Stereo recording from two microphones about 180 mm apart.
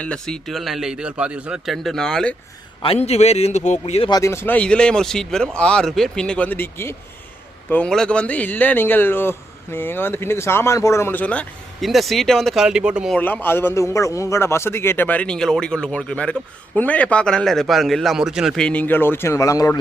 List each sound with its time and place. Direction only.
0.0 s speech: 5° left (ahead or behind)
2.8 s a man's voice: 35° left (ahead or behind)
4.1 s a man's voice: 15° left (ahead or behind); by 13.1 s 5° right (ahead or behind)
13.1 s a man's voice: 10° left (ahead or behind)